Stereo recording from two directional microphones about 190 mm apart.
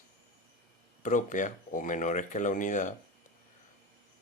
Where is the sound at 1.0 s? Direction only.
40° left (ahead or behind).